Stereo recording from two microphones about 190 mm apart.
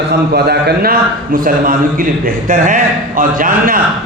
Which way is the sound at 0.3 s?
55° right (ahead or behind).